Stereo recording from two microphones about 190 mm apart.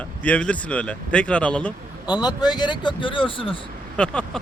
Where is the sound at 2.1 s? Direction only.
20° left (ahead or behind).